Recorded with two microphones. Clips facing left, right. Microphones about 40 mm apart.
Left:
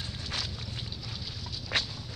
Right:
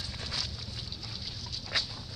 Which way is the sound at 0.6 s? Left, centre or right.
Left.